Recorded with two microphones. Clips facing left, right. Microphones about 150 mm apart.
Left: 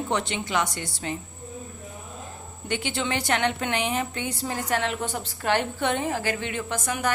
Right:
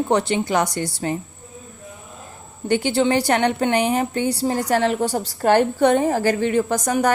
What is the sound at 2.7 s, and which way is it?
A woman's voice, 40° right (ahead or behind).